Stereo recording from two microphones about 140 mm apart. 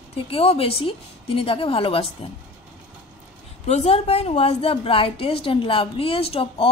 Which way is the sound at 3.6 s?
50° left (ahead or behind).